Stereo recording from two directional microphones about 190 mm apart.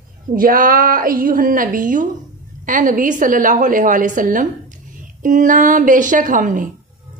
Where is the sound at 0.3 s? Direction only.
45° right (ahead or behind).